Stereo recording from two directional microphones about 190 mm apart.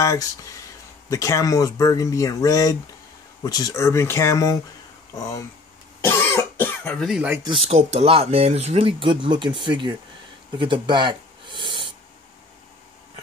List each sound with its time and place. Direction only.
0.0 s speech: 15° left (ahead or behind)
5.9 s cough: 10° left (ahead or behind); by 7.3 s 5° right (ahead or behind)
7.6 s speech: 35° right (ahead or behind)
10.6 s a sound: 25° right (ahead or behind)